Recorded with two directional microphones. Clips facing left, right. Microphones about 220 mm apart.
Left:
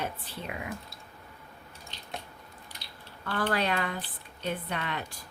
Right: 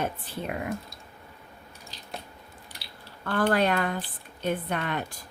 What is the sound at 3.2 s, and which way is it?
Speech, 50° right (ahead or behind).